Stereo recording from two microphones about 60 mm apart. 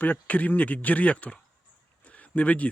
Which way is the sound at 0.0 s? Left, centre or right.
Left.